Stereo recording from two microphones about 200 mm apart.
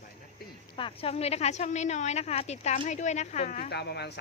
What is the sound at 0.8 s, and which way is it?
Speech, 25° left (ahead or behind).